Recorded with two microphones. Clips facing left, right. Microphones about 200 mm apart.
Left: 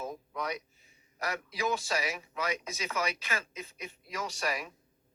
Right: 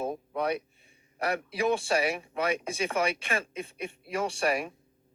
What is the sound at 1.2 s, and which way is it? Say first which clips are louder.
A woman's voice: right 6 dB; 30° right (ahead or behind).